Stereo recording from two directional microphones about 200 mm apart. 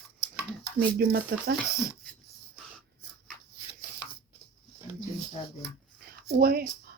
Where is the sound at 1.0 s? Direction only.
50° right (ahead or behind).